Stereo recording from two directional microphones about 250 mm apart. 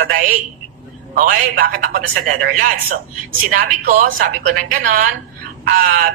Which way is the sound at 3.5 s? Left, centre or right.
Right.